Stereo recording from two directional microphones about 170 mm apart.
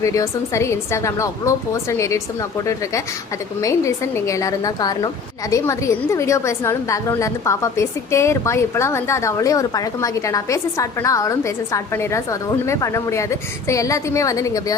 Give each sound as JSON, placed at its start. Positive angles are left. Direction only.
{"t": 0.0, "sound": "a woman's voice", "side_deg": 20}